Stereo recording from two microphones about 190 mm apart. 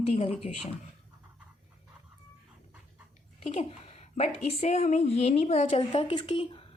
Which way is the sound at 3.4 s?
35° left (ahead or behind).